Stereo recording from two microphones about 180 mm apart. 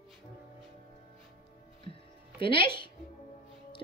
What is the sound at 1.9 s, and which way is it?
Music, 30° left (ahead or behind).